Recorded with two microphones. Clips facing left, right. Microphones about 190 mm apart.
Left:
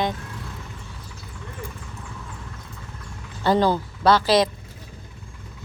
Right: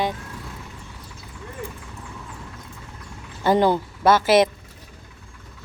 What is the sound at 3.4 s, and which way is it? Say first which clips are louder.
Speech: right 1 dB; 20° right (ahead or behind).